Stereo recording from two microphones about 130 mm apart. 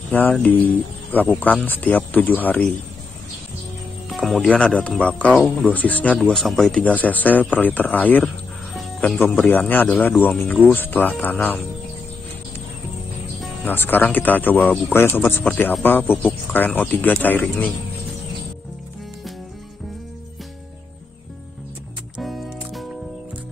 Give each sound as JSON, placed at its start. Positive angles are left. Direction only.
{"t": 0.1, "sound": "speech", "side_deg": 15}
{"t": 4.1, "sound": "speech", "side_deg": 5}
{"t": 5.7, "sound": "speech", "side_deg": 10}
{"t": 6.1, "sound": "speech", "side_deg": 0}
{"t": 9.5, "sound": "speech", "side_deg": 15}
{"t": 13.7, "sound": "speech", "side_deg": 15}
{"t": 22.1, "sound": "music", "side_deg": 0}